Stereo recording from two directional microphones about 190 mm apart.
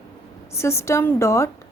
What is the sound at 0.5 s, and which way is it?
Speech, 15° left (ahead or behind).